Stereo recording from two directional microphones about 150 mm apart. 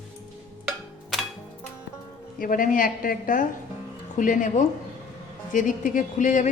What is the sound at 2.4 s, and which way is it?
A woman's voice, 65° left (ahead or behind).